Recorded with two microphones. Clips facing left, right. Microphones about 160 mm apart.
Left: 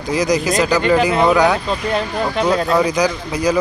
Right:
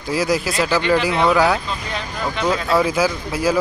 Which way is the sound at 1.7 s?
45° left (ahead or behind).